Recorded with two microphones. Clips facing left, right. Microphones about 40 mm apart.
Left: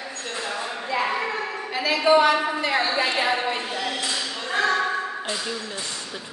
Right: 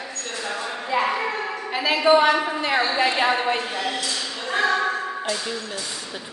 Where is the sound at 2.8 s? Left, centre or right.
Centre.